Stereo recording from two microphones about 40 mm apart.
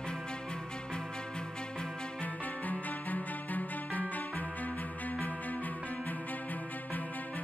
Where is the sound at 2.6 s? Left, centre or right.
Left.